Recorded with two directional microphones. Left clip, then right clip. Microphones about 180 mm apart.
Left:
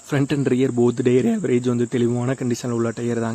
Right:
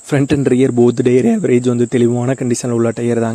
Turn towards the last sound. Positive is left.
turn(degrees=-35)  # may be behind; listen again after turning